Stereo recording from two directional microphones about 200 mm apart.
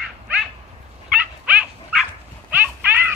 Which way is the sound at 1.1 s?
5° right (ahead or behind).